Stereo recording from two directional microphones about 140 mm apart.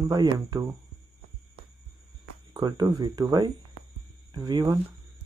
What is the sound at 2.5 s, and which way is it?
Speech, 30° right (ahead or behind).